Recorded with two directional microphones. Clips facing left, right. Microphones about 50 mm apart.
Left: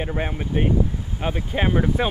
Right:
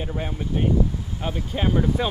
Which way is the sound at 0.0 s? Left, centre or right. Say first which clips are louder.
Left 3 dB; left.